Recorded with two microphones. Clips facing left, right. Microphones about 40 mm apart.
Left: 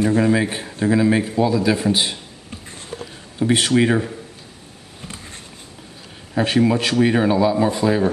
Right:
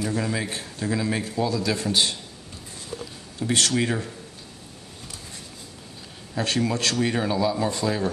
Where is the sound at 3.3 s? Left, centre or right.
Left.